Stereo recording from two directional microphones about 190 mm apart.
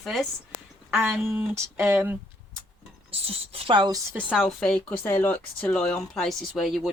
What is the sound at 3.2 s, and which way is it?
Speech, 30° right (ahead or behind).